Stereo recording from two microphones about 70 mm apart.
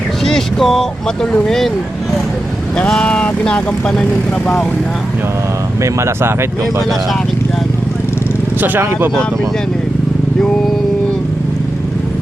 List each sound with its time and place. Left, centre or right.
0.3 s speech: centre
3.0 s speech: centre
5.8 s speech: right